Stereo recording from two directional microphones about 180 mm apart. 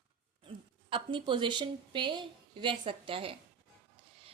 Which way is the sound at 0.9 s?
30° right (ahead or behind).